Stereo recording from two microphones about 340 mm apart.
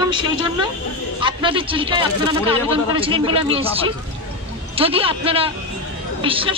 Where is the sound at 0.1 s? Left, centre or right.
Centre.